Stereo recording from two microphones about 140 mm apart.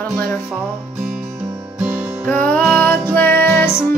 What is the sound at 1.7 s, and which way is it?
Music, 10° right (ahead or behind).